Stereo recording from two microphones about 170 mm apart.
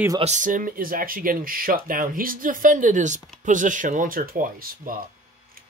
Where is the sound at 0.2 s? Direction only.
45° right (ahead or behind).